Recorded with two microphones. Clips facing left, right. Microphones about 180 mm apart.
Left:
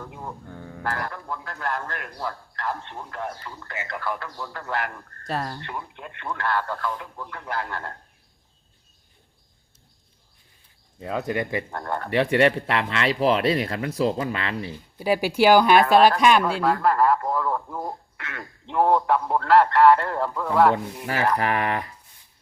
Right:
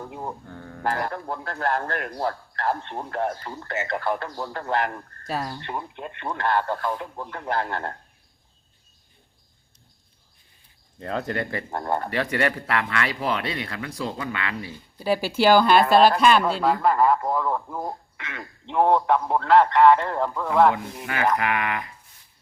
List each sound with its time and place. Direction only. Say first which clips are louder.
0.0 s speech: right 3 dB; 30° right (ahead or behind)
0.5 s speech: even; 10° left (ahead or behind)
0.9 s speech: right 3 dB; 25° right (ahead or behind)
1.1 s a man's voice: right 3 dB; 35° right (ahead or behind)
5.2 s speech: left 1 dB; centre (ahead or behind)
5.6 s speech: right 3 dB; 25° right (ahead or behind)
11.0 s speech: left 1 dB; 5° left (ahead or behind)
11.7 s speech: right 3 dB; 20° right (ahead or behind)
12.1 s speech: left 10 dB; 25° left (ahead or behind)
14.9 s speech: left 1 dB; 15° left (ahead or behind)
16.6 s speech: right 1 dB; centre (ahead or behind)
20.7 s speech: left 2 dB; 35° left (ahead or behind)